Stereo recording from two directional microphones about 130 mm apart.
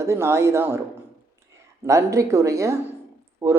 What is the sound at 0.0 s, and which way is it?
Speech, 20° right (ahead or behind).